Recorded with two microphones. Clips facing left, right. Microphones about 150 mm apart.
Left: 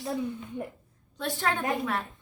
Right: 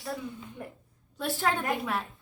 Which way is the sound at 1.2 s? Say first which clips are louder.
Even; 5° right (ahead or behind).